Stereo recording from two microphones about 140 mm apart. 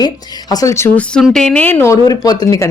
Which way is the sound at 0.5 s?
25° left (ahead or behind).